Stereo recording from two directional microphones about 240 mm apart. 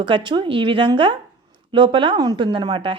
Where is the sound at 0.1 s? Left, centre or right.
Centre.